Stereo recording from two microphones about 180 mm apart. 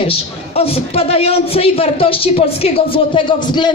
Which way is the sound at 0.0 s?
30° left (ahead or behind).